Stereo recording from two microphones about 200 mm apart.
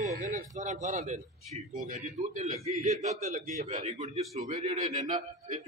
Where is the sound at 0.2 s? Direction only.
40° right (ahead or behind).